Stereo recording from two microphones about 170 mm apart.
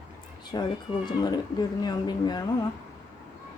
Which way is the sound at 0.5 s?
25° left (ahead or behind).